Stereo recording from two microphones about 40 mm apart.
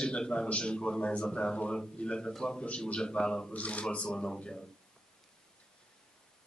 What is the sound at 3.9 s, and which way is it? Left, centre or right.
Speech, left.